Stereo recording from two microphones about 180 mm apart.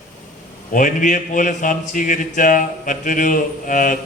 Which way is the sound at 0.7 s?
45° left (ahead or behind).